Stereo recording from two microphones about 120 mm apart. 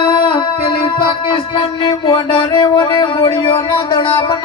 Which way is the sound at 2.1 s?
40° left (ahead or behind).